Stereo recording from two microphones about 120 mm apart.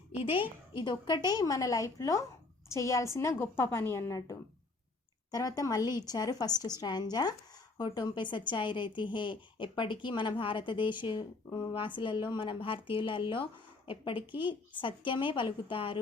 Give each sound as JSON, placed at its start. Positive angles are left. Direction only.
{"t": 0.2, "sound": "speech", "side_deg": 50}
{"t": 0.7, "sound": "a woman's voice", "side_deg": 40}